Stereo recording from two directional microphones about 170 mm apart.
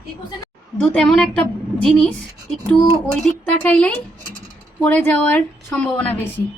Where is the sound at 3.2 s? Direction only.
5° left (ahead or behind).